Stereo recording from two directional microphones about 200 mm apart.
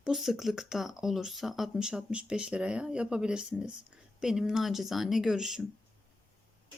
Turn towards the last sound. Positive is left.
turn(degrees=0)  # may be behind; listen again after turning